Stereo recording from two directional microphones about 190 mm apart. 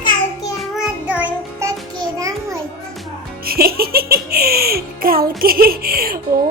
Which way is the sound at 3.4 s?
55° right (ahead or behind).